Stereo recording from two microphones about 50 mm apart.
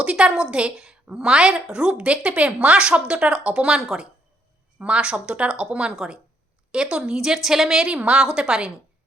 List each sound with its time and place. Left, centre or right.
0.0 s a woman's voice: right
7.9 s speech: right